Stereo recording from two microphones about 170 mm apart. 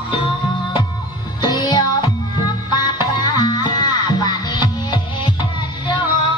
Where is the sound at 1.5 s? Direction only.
25° left (ahead or behind).